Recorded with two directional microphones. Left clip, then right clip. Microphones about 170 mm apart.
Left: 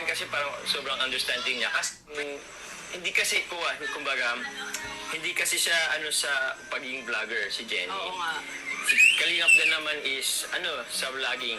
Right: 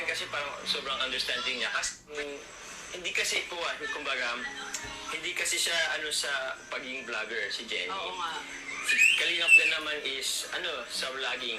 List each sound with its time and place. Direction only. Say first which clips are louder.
0.0 s speech: left 3 dB; 30° left (ahead or behind)